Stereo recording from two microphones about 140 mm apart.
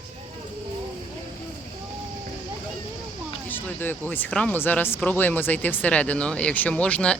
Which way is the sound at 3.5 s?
15° left (ahead or behind).